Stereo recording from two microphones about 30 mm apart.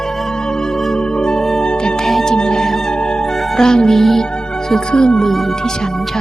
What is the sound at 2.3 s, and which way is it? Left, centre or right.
Music, left.